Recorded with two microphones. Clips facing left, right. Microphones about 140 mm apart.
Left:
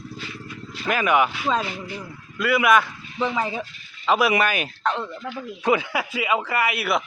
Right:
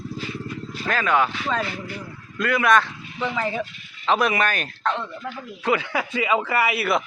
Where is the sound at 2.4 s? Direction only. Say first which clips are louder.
Left 1 dB; 5° left (ahead or behind).